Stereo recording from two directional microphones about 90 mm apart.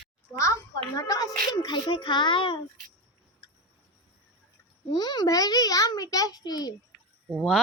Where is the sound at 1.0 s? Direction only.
40° left (ahead or behind); by 2.6 s 65° left (ahead or behind).